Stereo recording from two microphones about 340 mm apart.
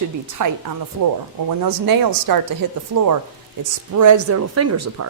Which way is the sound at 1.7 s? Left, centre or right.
Right.